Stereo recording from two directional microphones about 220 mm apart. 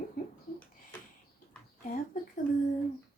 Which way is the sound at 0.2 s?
40° left (ahead or behind).